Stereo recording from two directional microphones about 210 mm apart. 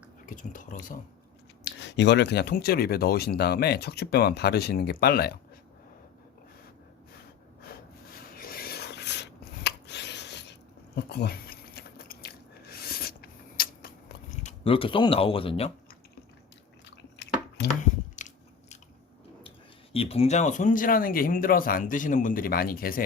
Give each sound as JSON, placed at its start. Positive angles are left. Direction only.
{"t": 0.3, "sound": "speech", "side_deg": 40}
{"t": 1.8, "sound": "speech", "side_deg": 55}
{"t": 7.6, "sound": "a sound", "side_deg": 45}
{"t": 17.6, "sound": "speech", "side_deg": 55}
{"t": 18.2, "sound": "biting", "side_deg": 35}
{"t": 19.4, "sound": "speech", "side_deg": 25}